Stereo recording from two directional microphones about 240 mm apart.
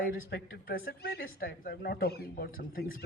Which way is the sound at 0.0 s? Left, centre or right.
Left.